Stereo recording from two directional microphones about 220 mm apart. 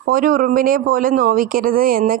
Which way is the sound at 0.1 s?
40° right (ahead or behind).